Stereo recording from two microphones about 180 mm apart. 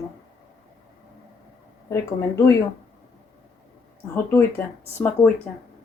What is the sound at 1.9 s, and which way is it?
Speech, 15° left (ahead or behind).